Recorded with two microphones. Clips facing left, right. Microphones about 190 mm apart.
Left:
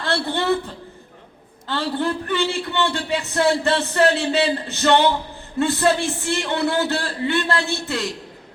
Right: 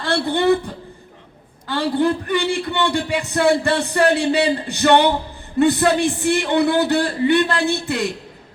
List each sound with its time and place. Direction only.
0.0 s a man's voice: 15° right (ahead or behind)